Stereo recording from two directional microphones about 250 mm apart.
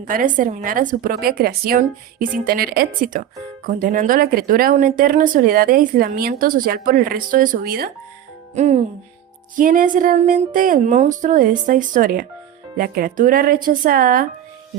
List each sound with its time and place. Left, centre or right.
0.0 s speech: right
8.5 s music: right
9.6 s speech: right